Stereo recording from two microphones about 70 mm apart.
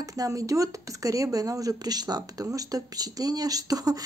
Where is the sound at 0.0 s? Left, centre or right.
Right.